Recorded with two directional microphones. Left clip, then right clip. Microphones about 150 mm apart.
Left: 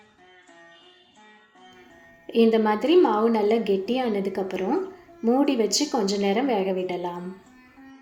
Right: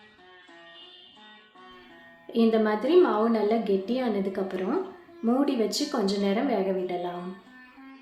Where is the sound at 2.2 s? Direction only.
20° left (ahead or behind).